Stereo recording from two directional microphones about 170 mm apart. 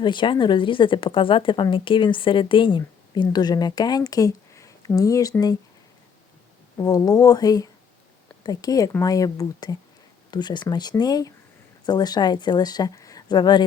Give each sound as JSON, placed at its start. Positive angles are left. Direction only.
{"t": 0.0, "sound": "a woman's voice", "side_deg": 30}
{"t": 6.7, "sound": "a woman's voice", "side_deg": 20}